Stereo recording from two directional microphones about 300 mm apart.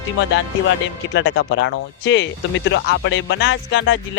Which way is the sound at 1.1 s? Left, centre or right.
Left.